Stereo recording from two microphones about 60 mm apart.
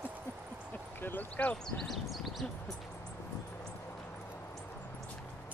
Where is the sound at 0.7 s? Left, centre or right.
Left.